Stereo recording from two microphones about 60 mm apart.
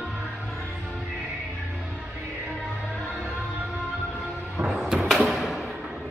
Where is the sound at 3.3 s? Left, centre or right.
Centre.